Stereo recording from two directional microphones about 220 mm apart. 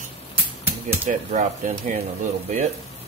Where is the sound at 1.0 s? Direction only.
35° right (ahead or behind).